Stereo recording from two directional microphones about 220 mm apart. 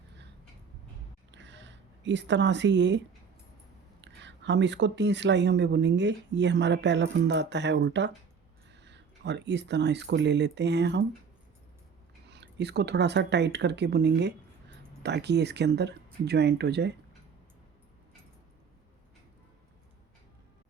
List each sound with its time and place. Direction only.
1.3 s a sound: 55° right (ahead or behind)
4.0 s speech: 55° right (ahead or behind)
12.3 s speech: 50° right (ahead or behind)